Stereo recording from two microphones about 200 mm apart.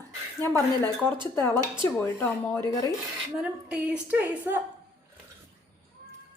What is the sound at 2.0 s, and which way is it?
Speech, 15° left (ahead or behind).